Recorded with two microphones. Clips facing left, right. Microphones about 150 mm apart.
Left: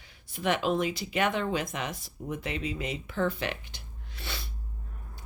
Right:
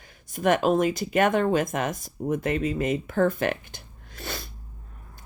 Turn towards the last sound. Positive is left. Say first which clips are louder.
# right 5 dB
turn(degrees=-45)  # may be behind; listen again after turning